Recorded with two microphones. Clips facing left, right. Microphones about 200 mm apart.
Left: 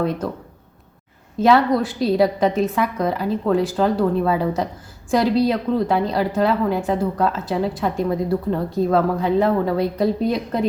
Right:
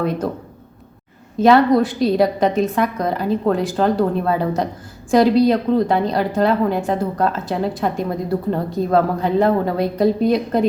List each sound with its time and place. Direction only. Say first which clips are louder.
1.4 s a woman's voice: right 3 dB; centre (ahead or behind)